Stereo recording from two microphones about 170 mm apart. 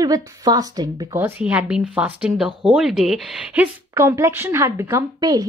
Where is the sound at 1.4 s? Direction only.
5° right (ahead or behind).